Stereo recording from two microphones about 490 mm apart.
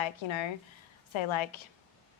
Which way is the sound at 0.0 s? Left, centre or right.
Left.